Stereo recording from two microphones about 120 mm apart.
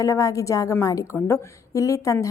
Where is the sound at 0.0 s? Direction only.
25° left (ahead or behind).